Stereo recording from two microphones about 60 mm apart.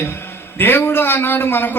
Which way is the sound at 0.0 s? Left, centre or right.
Left.